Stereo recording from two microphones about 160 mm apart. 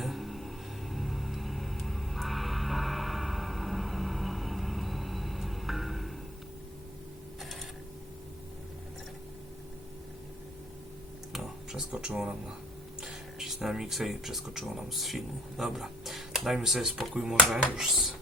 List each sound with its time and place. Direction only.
0.0 s music: centre (ahead or behind)
11.3 s a sound: centre (ahead or behind)
13.0 s speech: centre (ahead or behind)